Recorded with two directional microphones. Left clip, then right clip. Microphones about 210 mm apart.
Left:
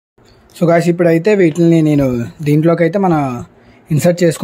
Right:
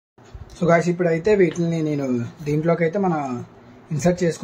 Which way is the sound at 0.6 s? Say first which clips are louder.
Left 7 dB; 60° left (ahead or behind).